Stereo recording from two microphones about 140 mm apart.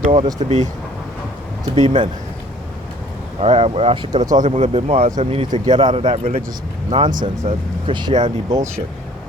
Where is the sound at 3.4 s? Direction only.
45° right (ahead or behind).